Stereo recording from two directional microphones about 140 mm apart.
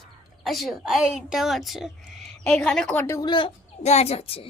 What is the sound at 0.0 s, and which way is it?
A woman's voice, centre (ahead or behind).